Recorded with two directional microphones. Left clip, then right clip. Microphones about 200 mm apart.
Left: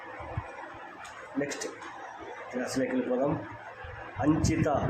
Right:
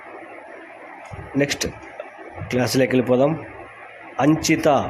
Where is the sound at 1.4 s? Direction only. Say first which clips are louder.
Right 12 dB; 35° right (ahead or behind).